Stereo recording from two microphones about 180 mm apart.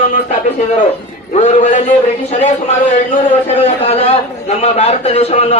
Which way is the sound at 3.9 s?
35° left (ahead or behind).